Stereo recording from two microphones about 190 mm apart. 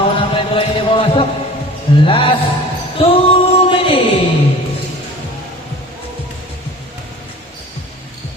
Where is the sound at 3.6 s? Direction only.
30° left (ahead or behind).